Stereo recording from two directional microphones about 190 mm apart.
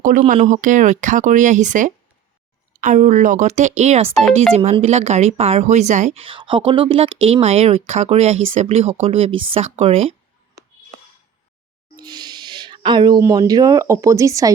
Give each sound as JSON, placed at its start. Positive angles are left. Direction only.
{"t": 0.3, "sound": "speech", "side_deg": -40}
{"t": 11.9, "sound": "speech", "side_deg": -20}